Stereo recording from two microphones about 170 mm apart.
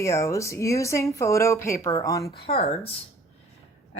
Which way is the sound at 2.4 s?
35° left (ahead or behind).